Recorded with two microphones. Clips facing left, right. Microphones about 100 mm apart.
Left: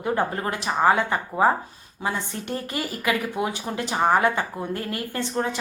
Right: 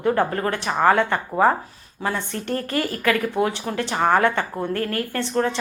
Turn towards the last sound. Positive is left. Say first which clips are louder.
# right 4 dB
turn(degrees=15)  # may be behind; listen again after turning